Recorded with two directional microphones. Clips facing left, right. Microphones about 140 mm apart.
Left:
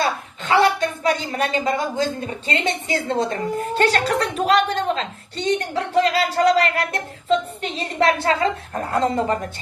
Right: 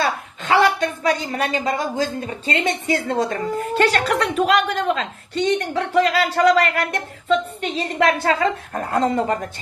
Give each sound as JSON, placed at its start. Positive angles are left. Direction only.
{"t": 0.5, "sound": "a woman's voice", "side_deg": 30}